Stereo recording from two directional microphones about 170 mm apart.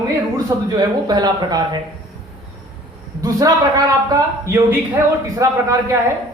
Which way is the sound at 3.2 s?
20° right (ahead or behind).